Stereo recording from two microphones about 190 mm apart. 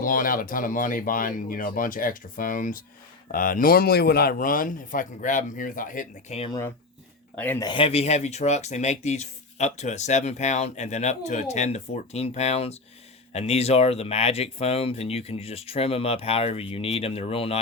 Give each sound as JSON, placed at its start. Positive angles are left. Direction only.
{"t": 0.0, "sound": "speech", "side_deg": 45}
{"t": 7.3, "sound": "speech", "side_deg": 10}
{"t": 7.6, "sound": "speech", "side_deg": 25}